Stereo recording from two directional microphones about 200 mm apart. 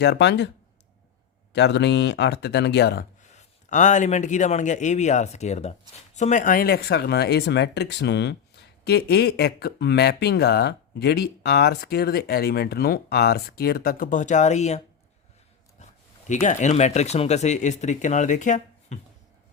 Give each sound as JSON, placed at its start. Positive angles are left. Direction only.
{"t": 0.0, "sound": "speech", "side_deg": 60}
{"t": 1.5, "sound": "speech", "side_deg": 60}
{"t": 3.2, "sound": "speech", "side_deg": 40}
{"t": 15.8, "sound": "speech", "side_deg": 35}